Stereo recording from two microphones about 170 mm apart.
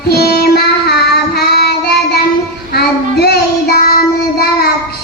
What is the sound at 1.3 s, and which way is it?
Child singing, 70° left (ahead or behind).